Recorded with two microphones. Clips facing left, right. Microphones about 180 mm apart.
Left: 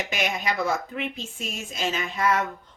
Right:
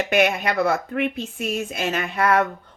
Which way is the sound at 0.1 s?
60° right (ahead or behind).